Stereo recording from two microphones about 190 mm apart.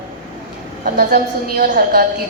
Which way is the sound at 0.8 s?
50° right (ahead or behind).